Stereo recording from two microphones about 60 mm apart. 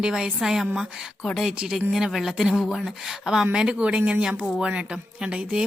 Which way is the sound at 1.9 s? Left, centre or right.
Centre.